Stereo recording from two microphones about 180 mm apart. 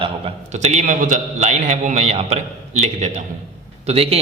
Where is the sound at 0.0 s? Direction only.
35° right (ahead or behind).